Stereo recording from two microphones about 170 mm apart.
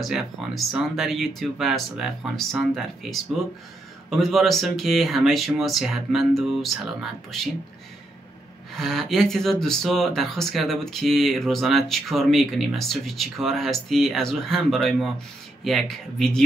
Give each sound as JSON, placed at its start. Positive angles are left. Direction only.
{"t": 0.0, "sound": "speech", "side_deg": 0}
{"t": 4.2, "sound": "speech", "side_deg": 0}
{"t": 8.7, "sound": "speech", "side_deg": 0}